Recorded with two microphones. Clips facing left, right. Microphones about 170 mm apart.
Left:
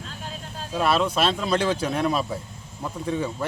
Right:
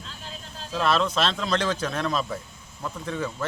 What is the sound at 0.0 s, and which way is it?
Vehicle, 50° left (ahead or behind).